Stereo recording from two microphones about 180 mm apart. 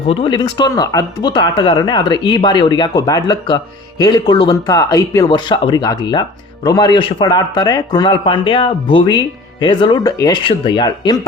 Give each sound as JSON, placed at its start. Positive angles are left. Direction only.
{"t": 0.1, "sound": "speech", "side_deg": 30}